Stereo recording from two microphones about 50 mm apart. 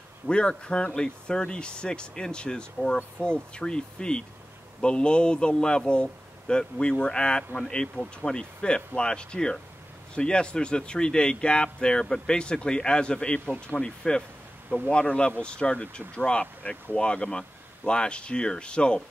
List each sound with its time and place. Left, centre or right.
0.3 s speech: centre
3.2 s speech: left
3.5 s speech: centre